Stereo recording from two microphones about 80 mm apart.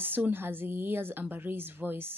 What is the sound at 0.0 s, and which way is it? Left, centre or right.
A woman's voice, right.